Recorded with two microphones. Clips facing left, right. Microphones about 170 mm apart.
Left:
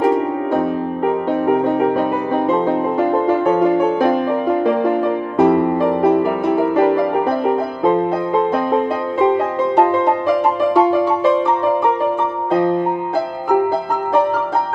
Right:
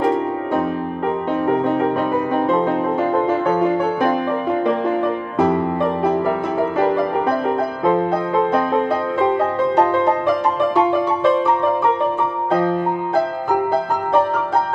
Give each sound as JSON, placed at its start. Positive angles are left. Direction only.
{"t": 1.0, "sound": "music", "side_deg": 15}
{"t": 5.4, "sound": "music", "side_deg": 10}